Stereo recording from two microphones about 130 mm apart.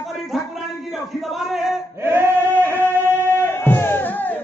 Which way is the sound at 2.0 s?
15° right (ahead or behind).